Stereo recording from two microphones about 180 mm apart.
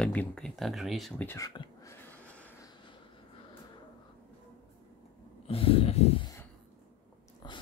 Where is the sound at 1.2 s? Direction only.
15° left (ahead or behind).